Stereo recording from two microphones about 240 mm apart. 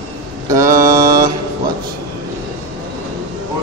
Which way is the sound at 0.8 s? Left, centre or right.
Centre.